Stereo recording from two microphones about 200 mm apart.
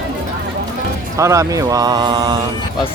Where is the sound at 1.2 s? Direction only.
15° right (ahead or behind).